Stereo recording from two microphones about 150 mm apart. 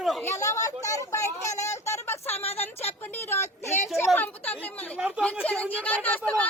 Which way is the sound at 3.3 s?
15° left (ahead or behind).